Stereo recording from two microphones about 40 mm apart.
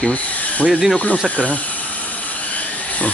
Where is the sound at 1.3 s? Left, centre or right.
Left.